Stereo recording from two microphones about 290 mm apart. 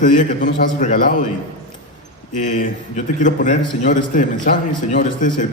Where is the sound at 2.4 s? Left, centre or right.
Left.